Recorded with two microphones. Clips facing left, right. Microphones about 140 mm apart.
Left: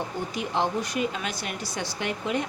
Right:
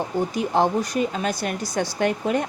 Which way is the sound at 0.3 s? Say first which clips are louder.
Right 5 dB; 40° right (ahead or behind).